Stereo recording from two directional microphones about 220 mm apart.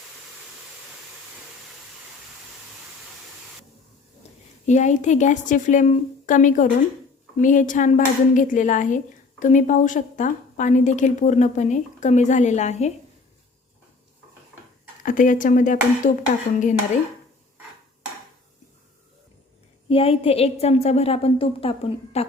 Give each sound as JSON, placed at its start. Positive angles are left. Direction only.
{"t": 4.2, "sound": "a sound", "side_deg": 30}
{"t": 4.6, "sound": "a woman's voice", "side_deg": 35}
{"t": 15.0, "sound": "a woman's voice", "side_deg": 35}
{"t": 19.9, "sound": "a woman's voice", "side_deg": 25}